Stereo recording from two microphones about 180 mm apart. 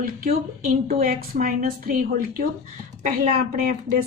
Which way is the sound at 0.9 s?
55° right (ahead or behind).